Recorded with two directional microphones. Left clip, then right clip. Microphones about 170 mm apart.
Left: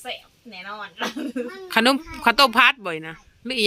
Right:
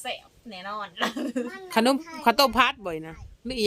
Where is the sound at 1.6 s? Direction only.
Centre (ahead or behind).